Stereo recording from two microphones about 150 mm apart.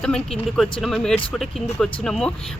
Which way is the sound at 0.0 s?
5° left (ahead or behind).